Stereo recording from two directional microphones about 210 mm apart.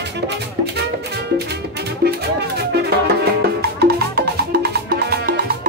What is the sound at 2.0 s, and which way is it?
Music, 50° right (ahead or behind).